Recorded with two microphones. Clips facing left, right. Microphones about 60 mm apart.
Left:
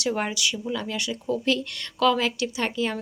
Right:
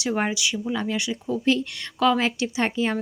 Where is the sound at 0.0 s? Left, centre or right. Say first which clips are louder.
Right 1 dB; centre.